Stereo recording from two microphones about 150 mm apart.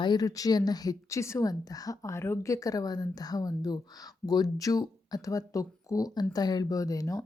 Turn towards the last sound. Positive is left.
turn(degrees=20)  # may be behind; listen again after turning